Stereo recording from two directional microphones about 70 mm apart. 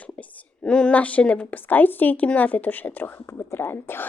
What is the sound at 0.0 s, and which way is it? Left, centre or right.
A woman's voice, left.